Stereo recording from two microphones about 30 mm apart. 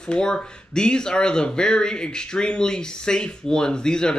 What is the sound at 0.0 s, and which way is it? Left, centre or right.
Speech, left.